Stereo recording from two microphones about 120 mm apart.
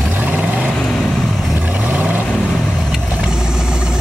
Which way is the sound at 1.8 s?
10° right (ahead or behind).